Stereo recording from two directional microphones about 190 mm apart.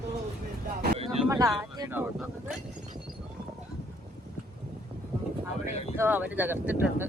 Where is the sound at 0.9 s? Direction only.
30° right (ahead or behind).